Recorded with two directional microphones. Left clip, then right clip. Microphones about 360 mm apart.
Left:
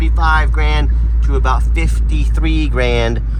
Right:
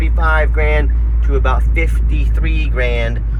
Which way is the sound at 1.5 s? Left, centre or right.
Centre.